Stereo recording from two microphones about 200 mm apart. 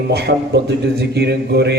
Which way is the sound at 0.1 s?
55° right (ahead or behind).